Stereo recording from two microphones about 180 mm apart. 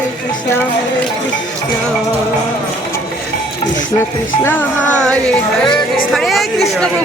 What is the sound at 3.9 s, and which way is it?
A woman's voice, 15° left (ahead or behind).